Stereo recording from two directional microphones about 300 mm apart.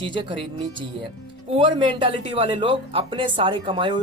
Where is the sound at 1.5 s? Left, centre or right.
Centre.